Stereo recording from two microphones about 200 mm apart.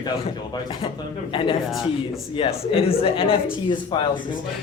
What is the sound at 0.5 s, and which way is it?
Speech, 25° left (ahead or behind).